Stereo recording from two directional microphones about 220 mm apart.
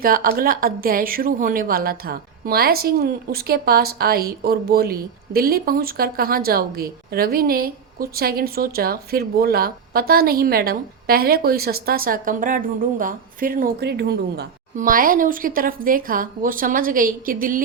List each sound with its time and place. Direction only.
0.0 s speech: 40° right (ahead or behind)